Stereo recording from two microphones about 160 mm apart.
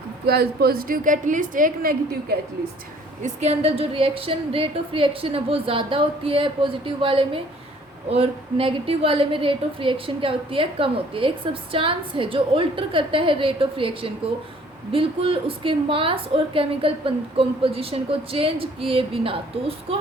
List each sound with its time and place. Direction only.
0.3 s a woman's voice: 75° right (ahead or behind)
3.2 s a woman's voice: 45° right (ahead or behind)